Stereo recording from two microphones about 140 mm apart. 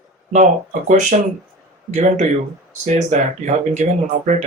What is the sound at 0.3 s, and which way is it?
Speech, 65° right (ahead or behind).